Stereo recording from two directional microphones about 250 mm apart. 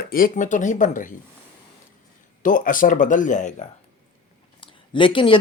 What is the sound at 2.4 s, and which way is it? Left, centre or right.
Speech, left.